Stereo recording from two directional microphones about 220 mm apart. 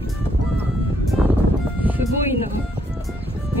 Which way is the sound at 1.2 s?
Centre (ahead or behind).